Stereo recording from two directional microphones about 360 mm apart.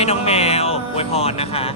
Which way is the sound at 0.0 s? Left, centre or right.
Centre.